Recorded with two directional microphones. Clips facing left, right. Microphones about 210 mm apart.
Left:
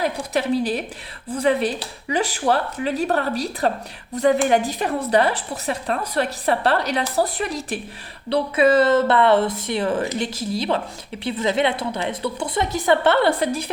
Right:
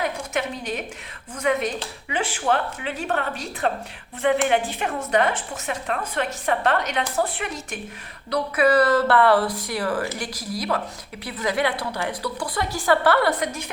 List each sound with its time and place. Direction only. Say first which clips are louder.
0.0 s speech: left 4 dB; 35° left (ahead or behind)
8.3 s speech: left 3 dB; 25° left (ahead or behind)